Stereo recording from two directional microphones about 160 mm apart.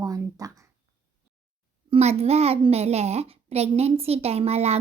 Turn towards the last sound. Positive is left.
turn(degrees=-40)  # may be behind; listen again after turning